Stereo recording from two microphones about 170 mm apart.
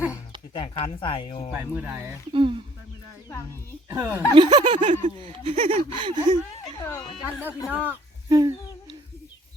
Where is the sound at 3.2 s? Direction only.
15° left (ahead or behind).